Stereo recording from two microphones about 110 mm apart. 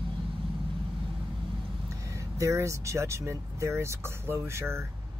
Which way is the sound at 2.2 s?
30° right (ahead or behind).